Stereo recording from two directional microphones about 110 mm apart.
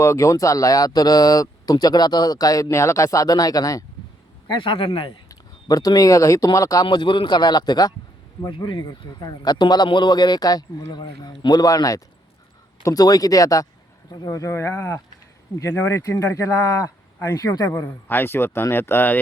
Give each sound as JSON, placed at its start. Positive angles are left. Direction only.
{"t": 0.0, "sound": "speech", "side_deg": 25}
{"t": 4.4, "sound": "a man's voice", "side_deg": 50}
{"t": 5.3, "sound": "speech", "side_deg": 35}
{"t": 6.8, "sound": "speech", "side_deg": 45}
{"t": 17.7, "sound": "speech", "side_deg": 20}